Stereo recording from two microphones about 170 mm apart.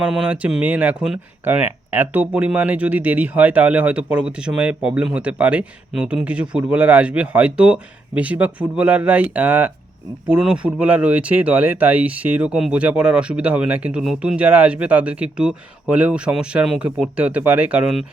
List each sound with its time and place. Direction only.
0.0 s speech: 5° right (ahead or behind)